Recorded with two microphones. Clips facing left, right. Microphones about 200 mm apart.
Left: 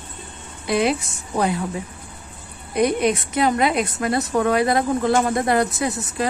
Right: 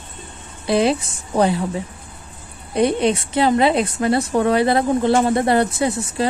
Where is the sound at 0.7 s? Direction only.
30° right (ahead or behind).